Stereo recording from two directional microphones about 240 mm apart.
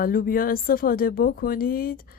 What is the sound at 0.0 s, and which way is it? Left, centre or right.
Speech, left.